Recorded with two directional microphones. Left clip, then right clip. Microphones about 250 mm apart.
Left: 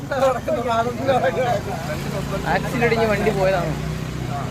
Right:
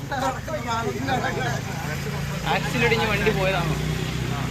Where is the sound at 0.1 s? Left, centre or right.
Left.